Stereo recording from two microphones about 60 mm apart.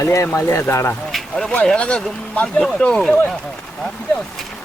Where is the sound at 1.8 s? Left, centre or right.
Left.